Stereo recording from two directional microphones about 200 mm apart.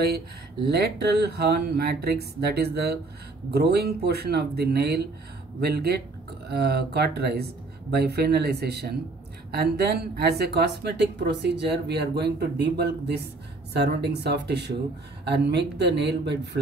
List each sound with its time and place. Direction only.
0.7 s a woman's voice: 55° right (ahead or behind)